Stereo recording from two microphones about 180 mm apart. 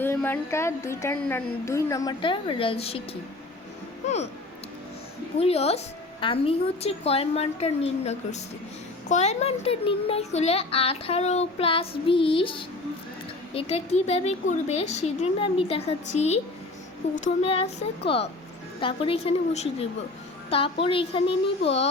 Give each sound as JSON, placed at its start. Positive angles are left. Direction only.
{"t": 0.0, "sound": "a woman's voice", "side_deg": 10}
{"t": 5.4, "sound": "a child's voice", "side_deg": 35}